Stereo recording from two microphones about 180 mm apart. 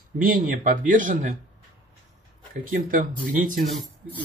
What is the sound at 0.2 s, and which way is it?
Speech, 45° right (ahead or behind).